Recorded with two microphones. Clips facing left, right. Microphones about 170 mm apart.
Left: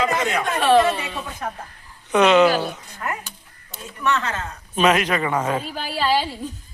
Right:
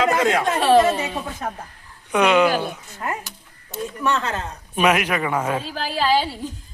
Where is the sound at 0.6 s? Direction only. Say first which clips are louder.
Even; 40° right (ahead or behind).